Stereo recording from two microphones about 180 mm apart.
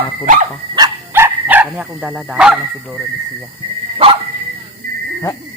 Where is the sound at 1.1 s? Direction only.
10° right (ahead or behind).